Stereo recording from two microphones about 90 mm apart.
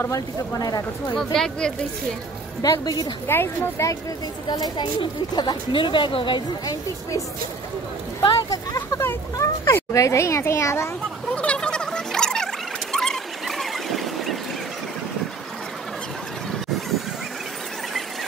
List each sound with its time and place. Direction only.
0.1 s speech: 45° left (ahead or behind)
1.1 s speech: 5° left (ahead or behind)
2.6 s speech: 50° left (ahead or behind)
3.3 s speech: 25° left (ahead or behind)
4.5 s speech: 55° left (ahead or behind)
6.6 s a child's voice: 40° left (ahead or behind)
8.2 s speech: 50° left (ahead or behind)
9.0 s a child's voice: 30° left (ahead or behind)
11.3 s a sound: 10° left (ahead or behind)